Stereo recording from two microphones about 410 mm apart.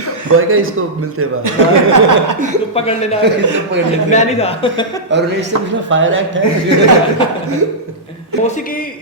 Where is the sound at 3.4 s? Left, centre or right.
Right.